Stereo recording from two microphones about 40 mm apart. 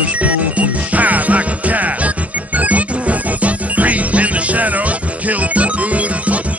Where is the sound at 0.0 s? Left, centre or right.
Right.